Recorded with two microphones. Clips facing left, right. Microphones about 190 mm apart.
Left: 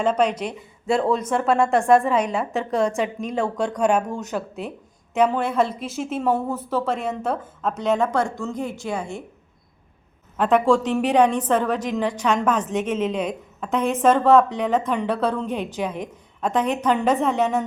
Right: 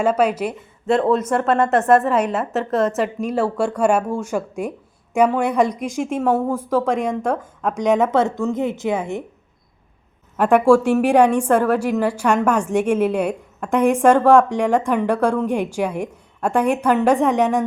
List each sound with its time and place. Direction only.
0.0 s a woman's voice: 5° right (ahead or behind)
10.3 s a woman's voice: 10° right (ahead or behind)